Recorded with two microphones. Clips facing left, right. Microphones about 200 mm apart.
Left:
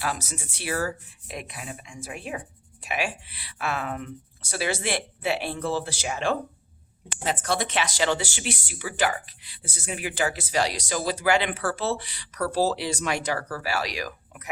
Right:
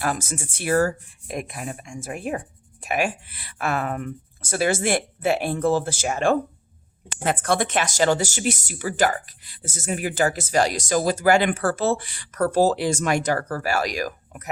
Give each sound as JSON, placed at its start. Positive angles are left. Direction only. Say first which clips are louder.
{"t": 0.0, "sound": "speech", "louder": "right 5 dB", "side_deg": -50}